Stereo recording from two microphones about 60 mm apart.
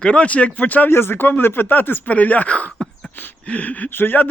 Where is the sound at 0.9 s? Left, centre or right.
Left.